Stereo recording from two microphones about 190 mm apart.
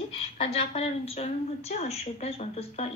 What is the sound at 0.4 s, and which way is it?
A woman's voice, 30° left (ahead or behind).